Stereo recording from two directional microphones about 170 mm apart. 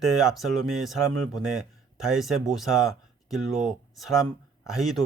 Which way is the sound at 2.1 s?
Centre (ahead or behind).